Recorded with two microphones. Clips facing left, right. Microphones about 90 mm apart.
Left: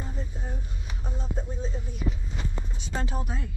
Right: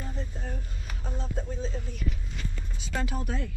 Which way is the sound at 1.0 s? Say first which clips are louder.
Even; 10° left (ahead or behind).